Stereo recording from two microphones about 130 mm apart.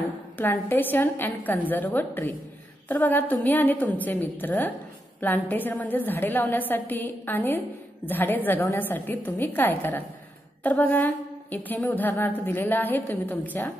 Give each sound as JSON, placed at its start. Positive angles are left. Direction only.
{"t": 0.4, "sound": "a woman's voice", "side_deg": 15}